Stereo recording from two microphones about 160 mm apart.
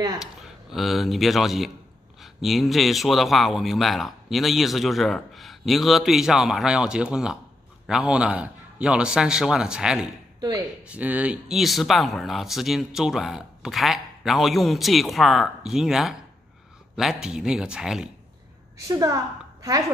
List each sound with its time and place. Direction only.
0.2 s speech: centre (ahead or behind)
10.4 s speech: 25° right (ahead or behind)
10.9 s speech: 10° right (ahead or behind)
18.8 s a woman's voice: 20° right (ahead or behind)